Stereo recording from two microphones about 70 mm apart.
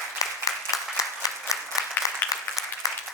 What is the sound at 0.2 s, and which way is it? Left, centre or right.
Applause, left.